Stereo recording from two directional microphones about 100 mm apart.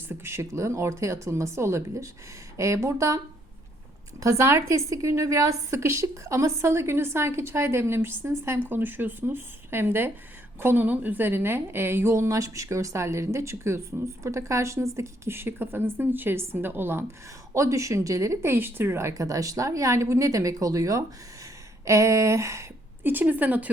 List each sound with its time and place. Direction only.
0.1 s a woman's voice: 25° right (ahead or behind)
4.2 s a woman's voice: 35° right (ahead or behind)
17.5 s speech: 30° right (ahead or behind)
23.0 s speech: 15° right (ahead or behind)